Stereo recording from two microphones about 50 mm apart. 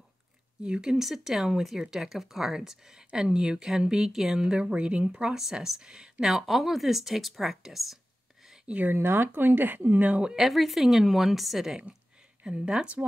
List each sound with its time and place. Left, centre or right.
0.6 s speech: centre
5.4 s speech: centre
8.8 s speech: right
10.3 s speech: centre
12.4 s speech: centre